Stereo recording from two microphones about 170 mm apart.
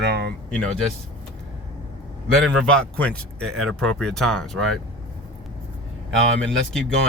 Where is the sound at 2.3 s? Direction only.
Centre (ahead or behind).